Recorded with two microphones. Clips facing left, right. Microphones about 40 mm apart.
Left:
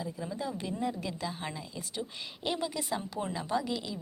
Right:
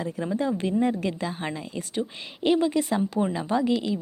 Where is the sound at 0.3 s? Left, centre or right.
Right.